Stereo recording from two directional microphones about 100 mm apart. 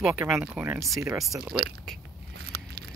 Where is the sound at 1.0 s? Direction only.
30° right (ahead or behind).